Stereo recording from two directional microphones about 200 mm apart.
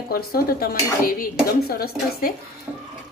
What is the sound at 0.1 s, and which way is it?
Speech, 50° left (ahead or behind).